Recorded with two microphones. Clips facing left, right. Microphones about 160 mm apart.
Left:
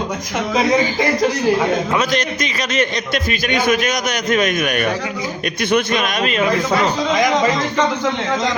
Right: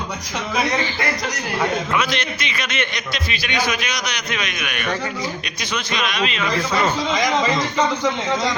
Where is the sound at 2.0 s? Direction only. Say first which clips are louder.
Left 5 dB; 45° left (ahead or behind).